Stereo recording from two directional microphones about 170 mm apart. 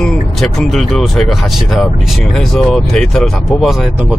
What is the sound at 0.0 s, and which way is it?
Speech, 5° left (ahead or behind).